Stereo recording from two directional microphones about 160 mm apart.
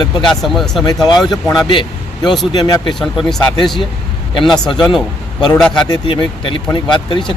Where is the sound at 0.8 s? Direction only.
25° left (ahead or behind).